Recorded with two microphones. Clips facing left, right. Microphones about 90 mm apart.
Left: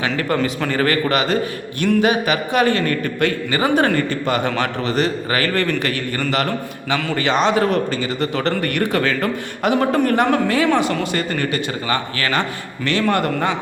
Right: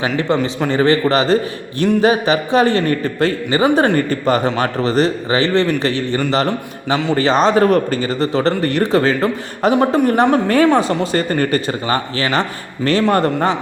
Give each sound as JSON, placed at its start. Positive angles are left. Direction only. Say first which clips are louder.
{"t": 0.0, "sound": "a man's voice", "louder": "right 3 dB", "side_deg": -25}